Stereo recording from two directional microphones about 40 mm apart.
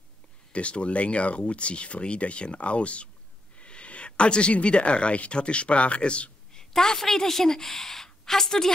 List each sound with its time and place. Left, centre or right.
0.5 s speech: left
6.5 s a woman's voice: centre